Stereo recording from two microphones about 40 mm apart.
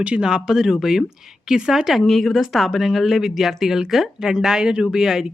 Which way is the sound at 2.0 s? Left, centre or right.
Centre.